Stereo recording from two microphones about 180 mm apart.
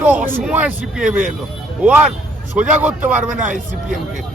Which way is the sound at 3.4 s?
45° right (ahead or behind).